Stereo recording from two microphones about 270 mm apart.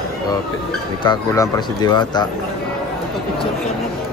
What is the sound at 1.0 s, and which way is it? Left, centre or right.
Speech, centre.